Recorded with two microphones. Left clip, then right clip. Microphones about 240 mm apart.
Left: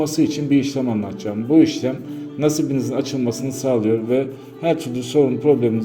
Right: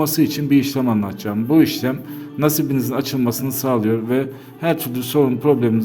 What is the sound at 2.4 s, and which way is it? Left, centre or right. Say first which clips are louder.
A man's voice: even; right.